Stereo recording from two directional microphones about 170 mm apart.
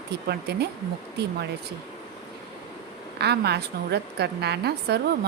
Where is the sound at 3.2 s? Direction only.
75° right (ahead or behind).